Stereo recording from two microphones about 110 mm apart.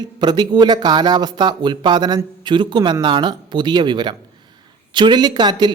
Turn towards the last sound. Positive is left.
turn(degrees=-40)  # may be behind; listen again after turning